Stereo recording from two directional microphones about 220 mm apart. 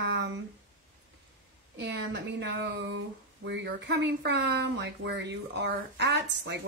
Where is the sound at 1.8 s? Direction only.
55° right (ahead or behind).